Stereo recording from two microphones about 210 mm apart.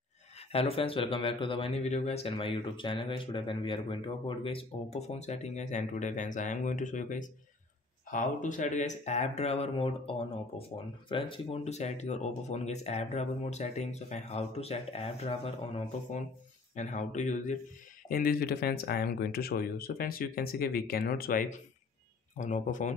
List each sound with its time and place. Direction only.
0.5 s speech: 30° left (ahead or behind)
16.7 s speech: 35° left (ahead or behind)